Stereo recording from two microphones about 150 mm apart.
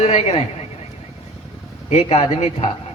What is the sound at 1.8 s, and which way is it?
Speech, 45° left (ahead or behind).